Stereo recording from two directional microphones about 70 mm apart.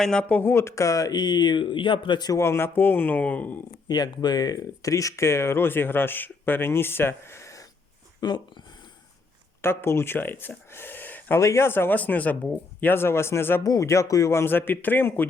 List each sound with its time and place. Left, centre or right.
0.0 s speech: centre
0.3 s speech: left
0.5 s speech: left
1.1 s speech: left
2.1 s speech: left
2.4 s speech: left
2.7 s speech: left
3.8 s speech: left
4.8 s speech: left
8.2 s speech: left
9.6 s speech: left
10.7 s a sound: left
11.3 s speech: left
13.7 s speech: left